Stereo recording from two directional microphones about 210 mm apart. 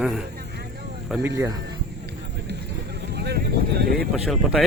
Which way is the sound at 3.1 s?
50° right (ahead or behind).